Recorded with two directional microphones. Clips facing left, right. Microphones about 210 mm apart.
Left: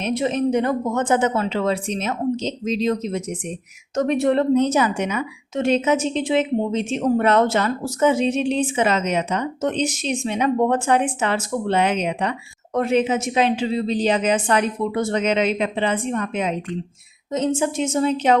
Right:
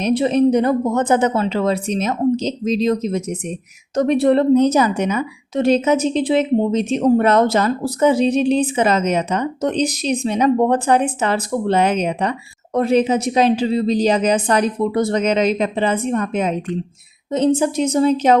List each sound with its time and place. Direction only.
0.0 s a woman's voice: 35° right (ahead or behind)